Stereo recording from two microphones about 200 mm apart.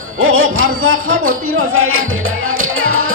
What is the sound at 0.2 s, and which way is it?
Music, 90° right.